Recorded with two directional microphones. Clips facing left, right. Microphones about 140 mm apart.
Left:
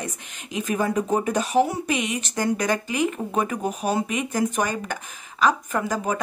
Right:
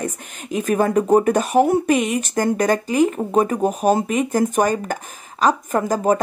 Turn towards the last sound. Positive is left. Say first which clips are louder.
# right 7 dB
turn(degrees=-45)  # may be behind; listen again after turning